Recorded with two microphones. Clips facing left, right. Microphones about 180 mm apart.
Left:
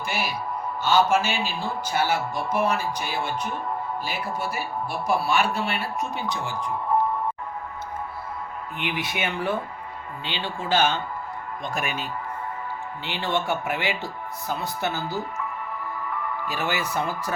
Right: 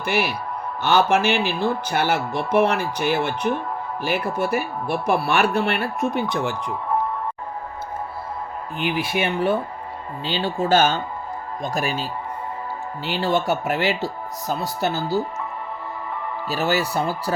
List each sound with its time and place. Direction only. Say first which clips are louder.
0.0 s speech: right 5 dB; 65° right (ahead or behind)
8.8 s speech: right 6 dB; 30° right (ahead or behind)
10.2 s speech: right 7 dB; 40° right (ahead or behind)
13.1 s speech: right 5 dB; 40° right (ahead or behind)